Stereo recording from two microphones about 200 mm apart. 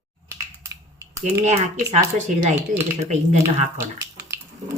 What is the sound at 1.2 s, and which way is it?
Speech, 35° right (ahead or behind).